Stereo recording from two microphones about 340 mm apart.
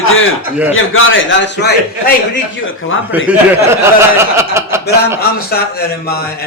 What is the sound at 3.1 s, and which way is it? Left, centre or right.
Speech, centre.